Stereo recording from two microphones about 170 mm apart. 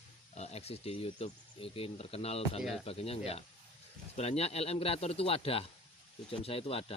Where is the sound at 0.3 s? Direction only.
40° left (ahead or behind).